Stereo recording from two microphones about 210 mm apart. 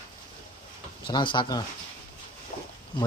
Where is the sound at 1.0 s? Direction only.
25° left (ahead or behind).